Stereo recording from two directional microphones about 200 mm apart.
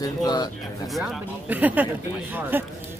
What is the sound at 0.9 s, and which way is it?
Speech, centre (ahead or behind).